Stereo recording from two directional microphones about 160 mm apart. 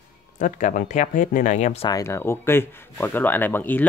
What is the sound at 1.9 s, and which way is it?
Speech, 20° left (ahead or behind).